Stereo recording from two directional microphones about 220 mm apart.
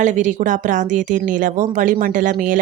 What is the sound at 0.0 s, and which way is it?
Speech, 35° right (ahead or behind).